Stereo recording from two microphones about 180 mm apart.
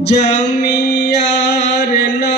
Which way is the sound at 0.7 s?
70° left (ahead or behind).